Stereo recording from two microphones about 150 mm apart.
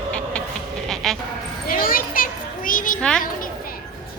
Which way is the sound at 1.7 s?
70° left (ahead or behind).